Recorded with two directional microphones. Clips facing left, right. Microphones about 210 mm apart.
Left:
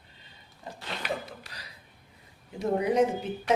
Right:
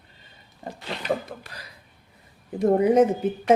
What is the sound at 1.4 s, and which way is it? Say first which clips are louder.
Speech: right 4 dB; 55° right (ahead or behind).